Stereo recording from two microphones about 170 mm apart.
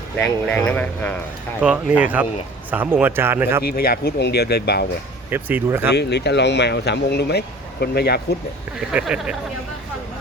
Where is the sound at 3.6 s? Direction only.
65° left (ahead or behind).